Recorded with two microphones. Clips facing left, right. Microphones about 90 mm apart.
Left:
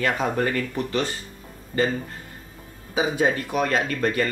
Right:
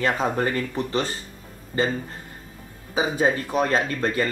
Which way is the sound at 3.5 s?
30° right (ahead or behind).